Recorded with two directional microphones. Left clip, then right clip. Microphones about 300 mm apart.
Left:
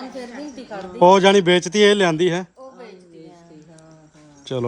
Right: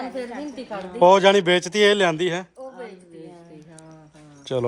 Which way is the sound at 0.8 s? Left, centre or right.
Centre.